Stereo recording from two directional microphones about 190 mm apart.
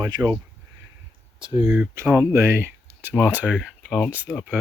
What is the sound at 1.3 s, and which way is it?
Speech, 25° right (ahead or behind).